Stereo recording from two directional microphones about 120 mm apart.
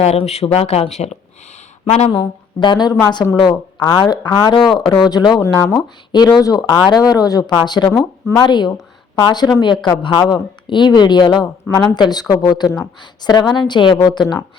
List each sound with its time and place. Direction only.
0.0 s speech: 65° left (ahead or behind); by 5.3 s 35° left (ahead or behind)
5.4 s speech: 25° left (ahead or behind)
6.1 s speech: 35° left (ahead or behind)
7.9 s speech: 15° left (ahead or behind)
8.4 s speech: 35° left (ahead or behind)